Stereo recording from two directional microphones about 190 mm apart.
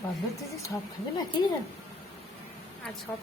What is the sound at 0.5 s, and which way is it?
Speech, 15° left (ahead or behind).